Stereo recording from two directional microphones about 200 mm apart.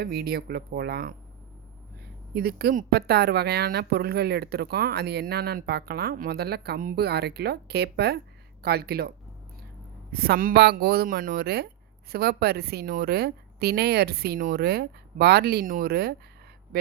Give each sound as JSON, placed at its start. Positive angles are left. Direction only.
{"t": 0.0, "sound": "speech", "side_deg": -50}
{"t": 2.3, "sound": "speech", "side_deg": -50}